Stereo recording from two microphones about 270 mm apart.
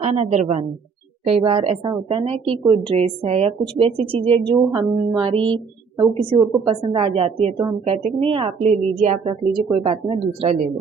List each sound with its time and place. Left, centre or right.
0.0 s a woman's voice: right